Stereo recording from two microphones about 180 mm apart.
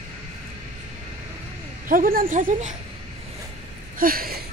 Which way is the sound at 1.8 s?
50° right (ahead or behind).